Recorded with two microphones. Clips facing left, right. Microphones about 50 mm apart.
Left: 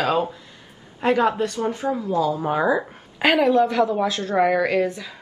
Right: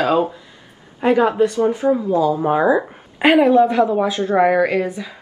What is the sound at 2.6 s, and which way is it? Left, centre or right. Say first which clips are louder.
Speech: right 5 dB; centre.